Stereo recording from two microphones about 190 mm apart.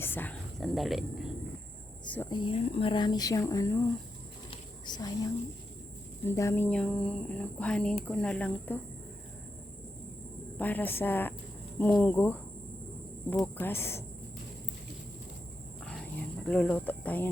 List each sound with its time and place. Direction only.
0.0 s speech: 10° left (ahead or behind)
0.6 s speech: centre (ahead or behind)
2.3 s speech: 25° left (ahead or behind)
4.5 s a sound: 20° left (ahead or behind)
6.2 s speech: 15° left (ahead or behind)
10.6 s speech: 10° left (ahead or behind)
13.4 s speech: 10° left (ahead or behind)
16.5 s speech: 5° left (ahead or behind)